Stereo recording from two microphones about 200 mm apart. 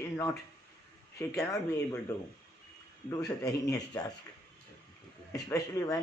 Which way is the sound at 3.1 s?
15° left (ahead or behind).